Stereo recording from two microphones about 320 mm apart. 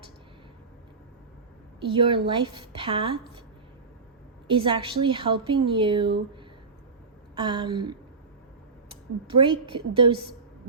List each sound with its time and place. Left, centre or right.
1.8 s a woman's voice: centre
4.4 s a woman's voice: centre
7.3 s a woman's voice: centre
9.2 s a woman's voice: centre